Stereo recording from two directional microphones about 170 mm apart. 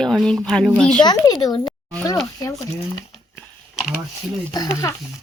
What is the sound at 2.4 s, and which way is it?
Speech, 20° left (ahead or behind).